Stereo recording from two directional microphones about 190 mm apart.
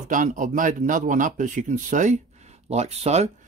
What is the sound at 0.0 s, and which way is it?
Speech, 40° right (ahead or behind).